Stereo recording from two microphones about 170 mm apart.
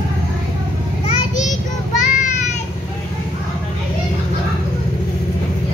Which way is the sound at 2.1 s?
45° left (ahead or behind).